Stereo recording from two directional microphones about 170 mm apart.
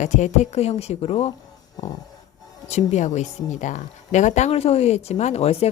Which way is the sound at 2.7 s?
45° left (ahead or behind).